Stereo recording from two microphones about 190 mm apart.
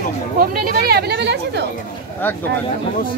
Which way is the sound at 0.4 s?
50° right (ahead or behind).